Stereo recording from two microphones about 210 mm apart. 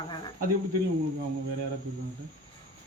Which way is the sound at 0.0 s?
20° left (ahead or behind).